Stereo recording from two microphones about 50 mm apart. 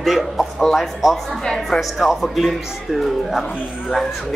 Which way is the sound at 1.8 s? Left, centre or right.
Centre.